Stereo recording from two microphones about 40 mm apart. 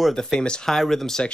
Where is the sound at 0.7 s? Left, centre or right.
Centre.